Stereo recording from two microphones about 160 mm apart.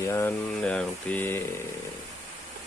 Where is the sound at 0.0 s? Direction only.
15° left (ahead or behind).